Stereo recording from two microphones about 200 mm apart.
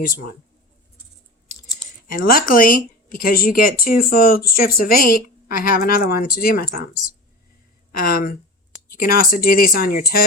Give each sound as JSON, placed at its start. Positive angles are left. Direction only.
{"t": 2.1, "sound": "speech", "side_deg": 45}
{"t": 7.9, "sound": "speech", "side_deg": 45}